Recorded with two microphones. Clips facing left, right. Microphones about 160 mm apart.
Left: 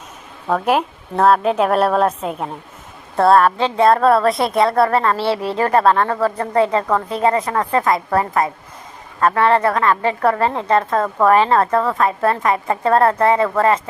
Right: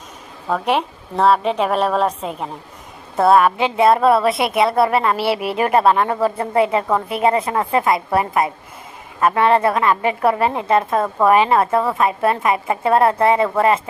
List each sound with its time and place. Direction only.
0.5 s a woman's voice: centre (ahead or behind); by 13.7 s 20° right (ahead or behind)